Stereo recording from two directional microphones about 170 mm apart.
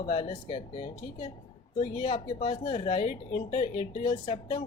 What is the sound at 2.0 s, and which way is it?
Speech, 30° left (ahead or behind).